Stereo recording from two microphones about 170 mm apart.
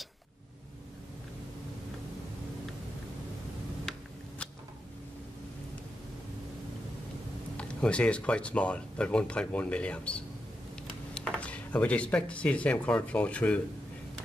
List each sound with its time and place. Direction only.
7.5 s speech: 5° left (ahead or behind)